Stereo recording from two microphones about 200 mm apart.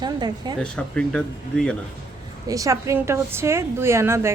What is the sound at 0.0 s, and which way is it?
Speech, 20° right (ahead or behind).